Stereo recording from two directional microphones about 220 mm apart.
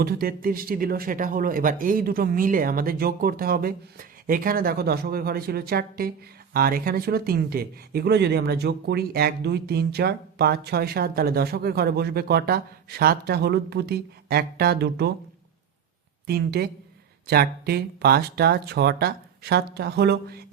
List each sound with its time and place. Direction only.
0.0 s speech: 40° right (ahead or behind)
16.2 s a woman's voice: 45° right (ahead or behind)